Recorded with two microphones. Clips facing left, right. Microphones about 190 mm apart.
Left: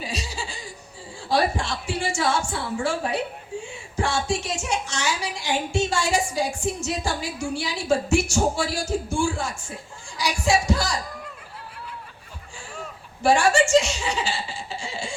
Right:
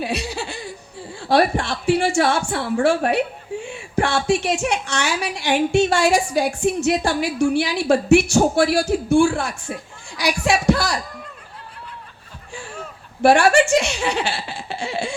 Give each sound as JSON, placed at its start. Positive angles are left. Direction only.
{"t": 0.0, "sound": "a woman's voice", "side_deg": -60}
{"t": 13.2, "sound": "speech", "side_deg": -65}